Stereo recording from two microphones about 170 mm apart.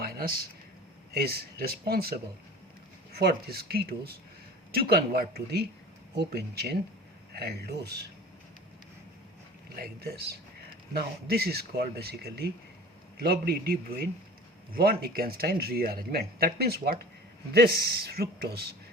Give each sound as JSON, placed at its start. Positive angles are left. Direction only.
{"t": 0.0, "sound": "a sound", "side_deg": -65}
{"t": 1.1, "sound": "speech", "side_deg": -65}
{"t": 3.2, "sound": "speech", "side_deg": -65}
{"t": 9.7, "sound": "speech", "side_deg": -65}